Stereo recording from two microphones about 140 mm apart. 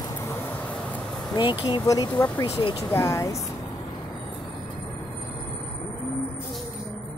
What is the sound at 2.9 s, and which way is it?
Speech, 20° left (ahead or behind).